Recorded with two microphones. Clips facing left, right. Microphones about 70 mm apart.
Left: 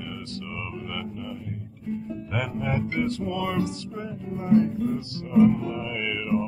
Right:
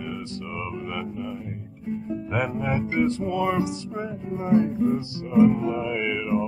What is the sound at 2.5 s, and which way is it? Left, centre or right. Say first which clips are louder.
Music: right 2 dB; centre.